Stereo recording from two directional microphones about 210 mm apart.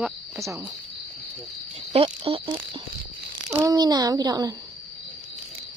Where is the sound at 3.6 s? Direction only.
20° right (ahead or behind).